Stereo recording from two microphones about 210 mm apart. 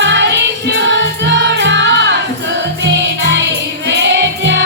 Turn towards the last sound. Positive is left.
turn(degrees=-55)  # may be behind; listen again after turning